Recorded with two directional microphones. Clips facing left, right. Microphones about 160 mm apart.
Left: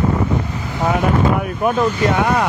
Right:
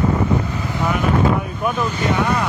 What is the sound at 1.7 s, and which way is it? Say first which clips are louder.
Speech: left 4 dB; 60° left (ahead or behind).